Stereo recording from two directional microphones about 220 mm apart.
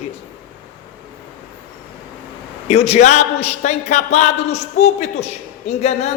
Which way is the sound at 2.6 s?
30° left (ahead or behind).